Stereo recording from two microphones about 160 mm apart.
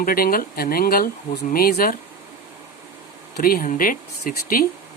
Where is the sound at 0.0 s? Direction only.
65° left (ahead or behind).